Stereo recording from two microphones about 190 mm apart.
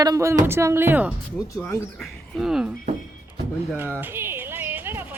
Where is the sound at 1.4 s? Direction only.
10° left (ahead or behind).